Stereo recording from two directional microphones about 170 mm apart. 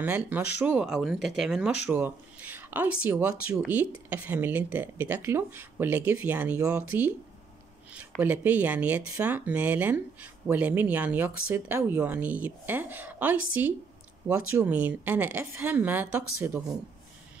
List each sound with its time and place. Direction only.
0.0 s speech: 10° right (ahead or behind)
8.2 s speech: 10° right (ahead or behind)